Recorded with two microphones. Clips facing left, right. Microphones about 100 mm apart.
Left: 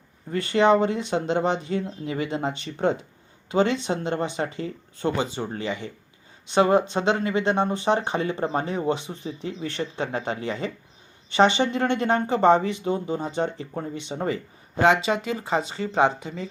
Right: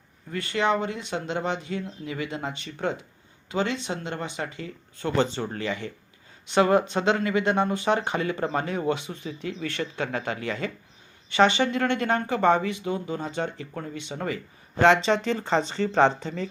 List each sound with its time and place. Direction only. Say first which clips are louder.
0.3 s speech: left 6 dB; 25° left (ahead or behind)
5.1 s speech: right 2 dB; 10° left (ahead or behind)
14.8 s speech: right 1 dB; 5° left (ahead or behind)